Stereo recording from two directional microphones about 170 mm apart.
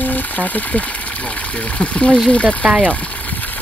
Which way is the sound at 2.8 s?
10° left (ahead or behind).